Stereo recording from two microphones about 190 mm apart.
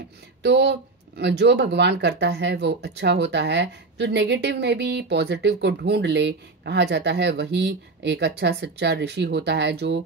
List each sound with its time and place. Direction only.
0.4 s speech: 65° right (ahead or behind)